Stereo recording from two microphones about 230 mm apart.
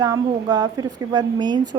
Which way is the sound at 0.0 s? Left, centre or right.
Centre.